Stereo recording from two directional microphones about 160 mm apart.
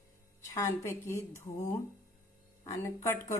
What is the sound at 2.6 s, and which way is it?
Speech, 20° left (ahead or behind).